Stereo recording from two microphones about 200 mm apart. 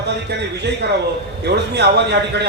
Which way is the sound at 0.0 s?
55° right (ahead or behind).